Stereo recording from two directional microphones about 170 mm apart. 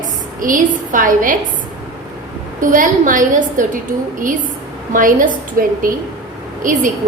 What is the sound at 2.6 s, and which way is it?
A woman's voice, 50° right (ahead or behind).